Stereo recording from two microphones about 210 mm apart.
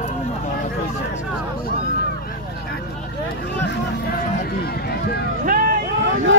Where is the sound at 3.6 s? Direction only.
45° left (ahead or behind).